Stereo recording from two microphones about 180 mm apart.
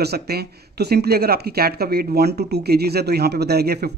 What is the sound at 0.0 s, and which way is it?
Speech, 60° right (ahead or behind).